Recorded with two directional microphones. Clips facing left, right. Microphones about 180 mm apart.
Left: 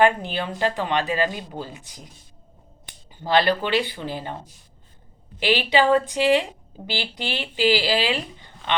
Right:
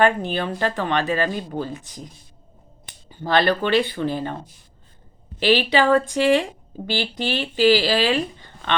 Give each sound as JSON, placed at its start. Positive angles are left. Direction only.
{"t": 0.3, "sound": "speech", "side_deg": 15}
{"t": 3.1, "sound": "speech", "side_deg": 15}
{"t": 5.4, "sound": "speech", "side_deg": 15}